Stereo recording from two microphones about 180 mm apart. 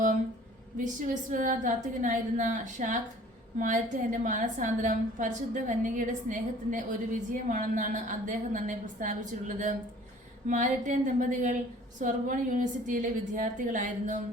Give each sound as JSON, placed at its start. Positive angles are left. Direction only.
{"t": 1.0, "sound": "a woman's voice", "side_deg": -45}
{"t": 10.4, "sound": "a woman's voice", "side_deg": -45}